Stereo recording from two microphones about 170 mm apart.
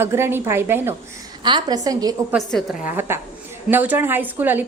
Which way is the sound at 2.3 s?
Centre (ahead or behind).